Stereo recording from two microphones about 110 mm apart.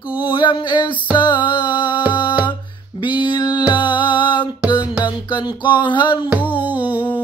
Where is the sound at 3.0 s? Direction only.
45° left (ahead or behind).